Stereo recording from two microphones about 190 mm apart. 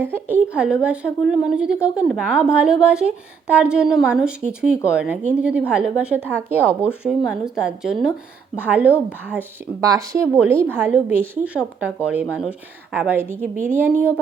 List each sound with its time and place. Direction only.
0.0 s a woman's voice: 10° right (ahead or behind)